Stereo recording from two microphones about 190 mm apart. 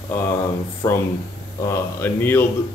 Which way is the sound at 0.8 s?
15° left (ahead or behind).